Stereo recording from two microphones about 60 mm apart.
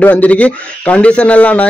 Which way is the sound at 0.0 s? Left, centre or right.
Left.